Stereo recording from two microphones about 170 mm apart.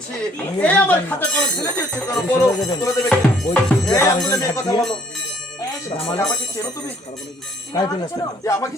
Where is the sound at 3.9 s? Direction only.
20° left (ahead or behind).